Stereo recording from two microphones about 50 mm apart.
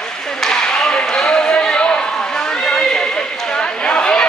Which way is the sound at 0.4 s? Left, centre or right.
Centre.